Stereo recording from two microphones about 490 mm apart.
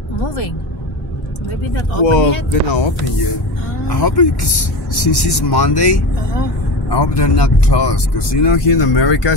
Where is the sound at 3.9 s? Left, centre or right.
Left.